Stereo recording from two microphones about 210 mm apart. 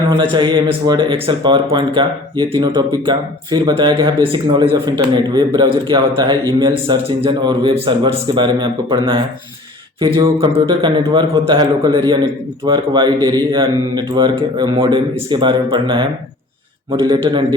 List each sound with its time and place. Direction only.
0.2 s speech: 25° right (ahead or behind)